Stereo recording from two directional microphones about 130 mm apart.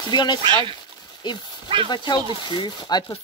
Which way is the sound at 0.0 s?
35° left (ahead or behind).